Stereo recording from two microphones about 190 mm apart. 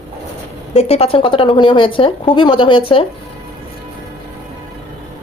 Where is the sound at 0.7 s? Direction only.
35° left (ahead or behind).